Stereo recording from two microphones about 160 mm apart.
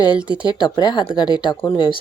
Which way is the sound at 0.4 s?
25° left (ahead or behind).